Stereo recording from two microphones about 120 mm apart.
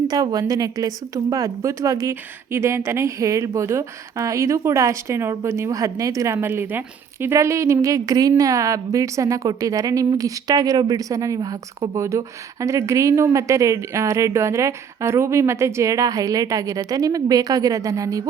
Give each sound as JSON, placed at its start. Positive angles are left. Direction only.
{"t": 0.1, "sound": "a woman's voice", "side_deg": -35}